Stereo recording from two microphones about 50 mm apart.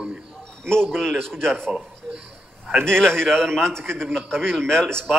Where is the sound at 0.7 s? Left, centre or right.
Centre.